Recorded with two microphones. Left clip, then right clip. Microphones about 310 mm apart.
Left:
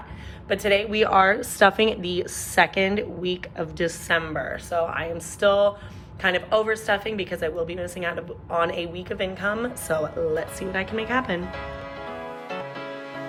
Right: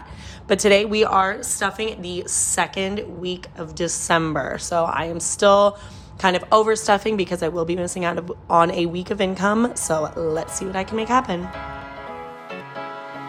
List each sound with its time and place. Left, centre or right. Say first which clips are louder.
0.4 s a woman's voice: right 5 dB; centre
12.5 s music: right 1 dB; centre